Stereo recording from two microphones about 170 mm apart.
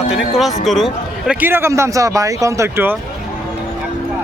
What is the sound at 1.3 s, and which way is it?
Speech, 10° right (ahead or behind).